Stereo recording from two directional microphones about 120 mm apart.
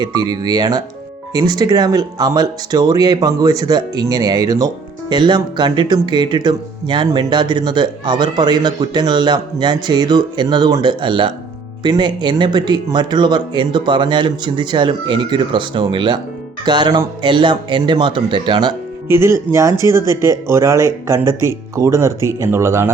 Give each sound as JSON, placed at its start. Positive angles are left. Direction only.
{"t": 0.0, "sound": "speech", "side_deg": -35}
{"t": 19.0, "sound": "speech", "side_deg": -20}